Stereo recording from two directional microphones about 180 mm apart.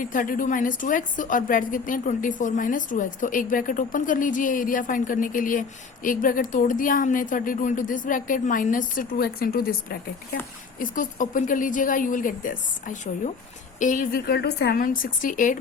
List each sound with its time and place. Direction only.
0.0 s a woman's voice: 50° left (ahead or behind)